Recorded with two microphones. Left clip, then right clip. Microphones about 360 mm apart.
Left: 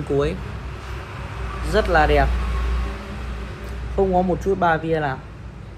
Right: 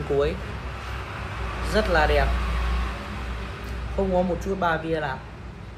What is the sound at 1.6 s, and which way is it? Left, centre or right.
Speech, centre.